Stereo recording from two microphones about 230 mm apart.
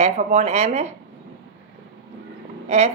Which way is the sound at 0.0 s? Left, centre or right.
Right.